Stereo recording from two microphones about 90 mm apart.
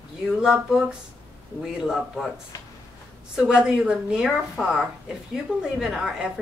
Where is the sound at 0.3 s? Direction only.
5° right (ahead or behind).